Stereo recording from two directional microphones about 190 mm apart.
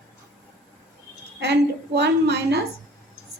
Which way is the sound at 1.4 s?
65° right (ahead or behind).